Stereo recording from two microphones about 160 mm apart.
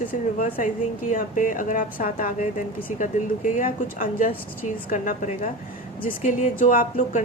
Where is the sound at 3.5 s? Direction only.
55° left (ahead or behind).